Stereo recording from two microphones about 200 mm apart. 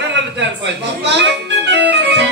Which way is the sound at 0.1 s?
65° right (ahead or behind).